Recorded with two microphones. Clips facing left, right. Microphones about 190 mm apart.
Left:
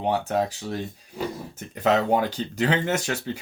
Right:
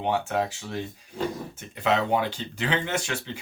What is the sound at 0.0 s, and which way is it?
Speech, 35° left (ahead or behind).